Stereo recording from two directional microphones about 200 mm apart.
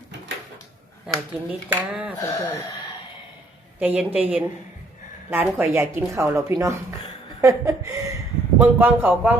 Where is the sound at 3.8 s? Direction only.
10° right (ahead or behind).